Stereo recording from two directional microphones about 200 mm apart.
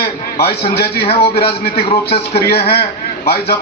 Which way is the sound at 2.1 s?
50° left (ahead or behind).